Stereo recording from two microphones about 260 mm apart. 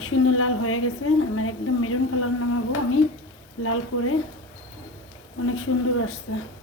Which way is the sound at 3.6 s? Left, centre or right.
Left.